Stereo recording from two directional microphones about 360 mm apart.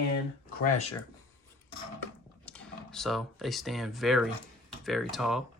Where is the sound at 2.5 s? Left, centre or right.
Centre.